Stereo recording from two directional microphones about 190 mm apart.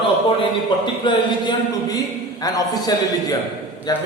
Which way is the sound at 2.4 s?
20° left (ahead or behind).